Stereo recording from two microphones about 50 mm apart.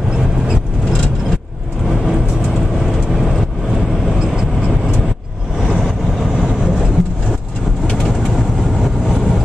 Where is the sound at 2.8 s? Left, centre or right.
Centre.